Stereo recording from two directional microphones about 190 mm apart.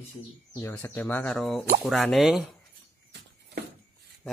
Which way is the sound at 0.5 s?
15° left (ahead or behind).